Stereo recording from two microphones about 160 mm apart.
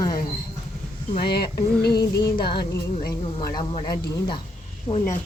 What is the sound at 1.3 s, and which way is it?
Music, 90° left.